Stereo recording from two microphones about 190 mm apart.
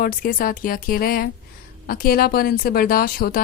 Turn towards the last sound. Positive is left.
turn(degrees=50)  # may be behind; listen again after turning